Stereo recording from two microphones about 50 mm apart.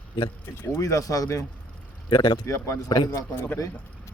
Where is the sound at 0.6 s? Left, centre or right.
Left.